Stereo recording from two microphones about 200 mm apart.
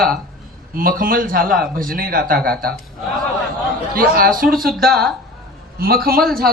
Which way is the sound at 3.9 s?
45° right (ahead or behind).